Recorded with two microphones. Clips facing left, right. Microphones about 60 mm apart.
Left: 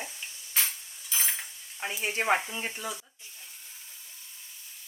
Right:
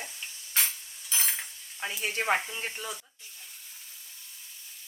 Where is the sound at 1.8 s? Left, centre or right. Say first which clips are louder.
Left 1 dB; left.